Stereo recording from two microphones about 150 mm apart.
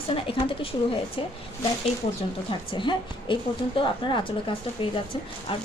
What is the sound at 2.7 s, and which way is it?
A woman's voice, 35° left (ahead or behind).